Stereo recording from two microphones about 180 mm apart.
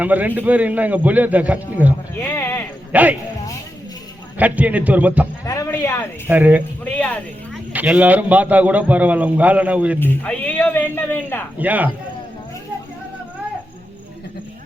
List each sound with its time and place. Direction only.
0.0 s a man's voice: 10° right (ahead or behind)
2.2 s speech: 15° left (ahead or behind)
2.9 s a man's voice: 10° right (ahead or behind)
4.4 s a man's voice: 10° right (ahead or behind)
5.5 s speech: 20° left (ahead or behind)
6.2 s a man's voice: 10° right (ahead or behind)
6.8 s speech: 10° left (ahead or behind)
7.7 s a man's voice: 10° right (ahead or behind)
10.0 s speech: 10° left (ahead or behind)
11.5 s a man's voice: 10° right (ahead or behind)